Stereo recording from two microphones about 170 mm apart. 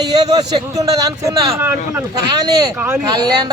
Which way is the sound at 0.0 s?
25° right (ahead or behind).